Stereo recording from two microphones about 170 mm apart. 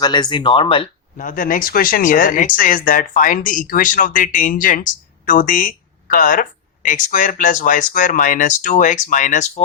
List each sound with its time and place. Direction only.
0.0 s speech: 25° left (ahead or behind)
1.1 s speech: 50° left (ahead or behind)